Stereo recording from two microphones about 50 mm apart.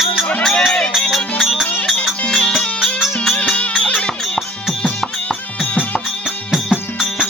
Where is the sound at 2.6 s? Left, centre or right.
Left.